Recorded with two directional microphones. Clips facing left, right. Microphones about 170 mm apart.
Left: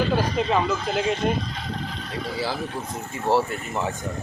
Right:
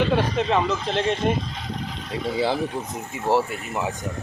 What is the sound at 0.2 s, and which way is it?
Speech, centre (ahead or behind).